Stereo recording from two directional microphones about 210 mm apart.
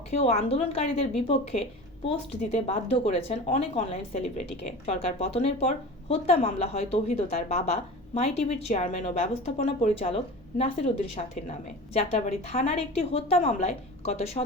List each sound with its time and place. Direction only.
0.1 s speech: 30° left (ahead or behind)